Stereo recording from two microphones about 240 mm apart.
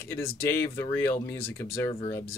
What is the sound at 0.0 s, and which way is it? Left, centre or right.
Speech, centre.